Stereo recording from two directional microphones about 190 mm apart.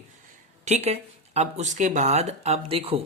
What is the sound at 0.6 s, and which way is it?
Speech, 35° right (ahead or behind).